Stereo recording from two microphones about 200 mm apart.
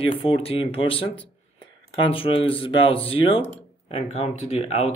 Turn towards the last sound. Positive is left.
turn(degrees=30)  # may be behind; listen again after turning